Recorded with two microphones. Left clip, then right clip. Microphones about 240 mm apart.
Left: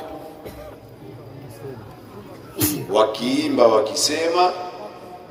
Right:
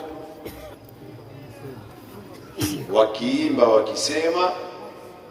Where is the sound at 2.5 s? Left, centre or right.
Left.